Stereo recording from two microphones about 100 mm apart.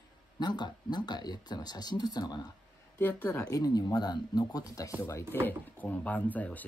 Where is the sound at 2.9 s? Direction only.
20° left (ahead or behind).